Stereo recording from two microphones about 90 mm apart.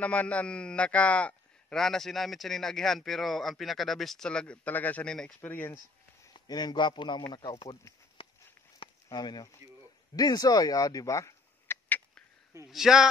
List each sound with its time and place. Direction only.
0.0 s a man's voice: 15° left (ahead or behind)
5.4 s speech: 20° left (ahead or behind)
6.3 s a man's voice: 50° left (ahead or behind)
8.2 s a sound: 90° left
8.7 s a sound: 50° left (ahead or behind)
10.1 s speech: 45° left (ahead or behind); by 12.0 s 25° left (ahead or behind)
12.6 s a man's voice: 5° right (ahead or behind)